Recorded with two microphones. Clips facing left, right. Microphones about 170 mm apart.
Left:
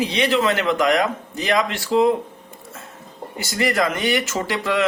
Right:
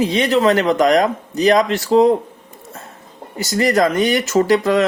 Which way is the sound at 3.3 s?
40° right (ahead or behind).